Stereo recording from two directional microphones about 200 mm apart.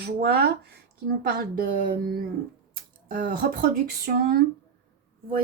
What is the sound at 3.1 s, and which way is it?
Speech, 45° right (ahead or behind).